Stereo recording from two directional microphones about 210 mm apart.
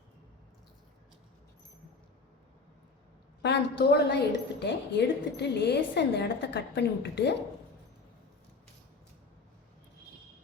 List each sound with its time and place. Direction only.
3.4 s a woman's voice: 55° left (ahead or behind)